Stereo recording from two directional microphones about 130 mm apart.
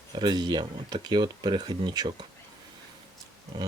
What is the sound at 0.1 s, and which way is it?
Speech, 35° right (ahead or behind).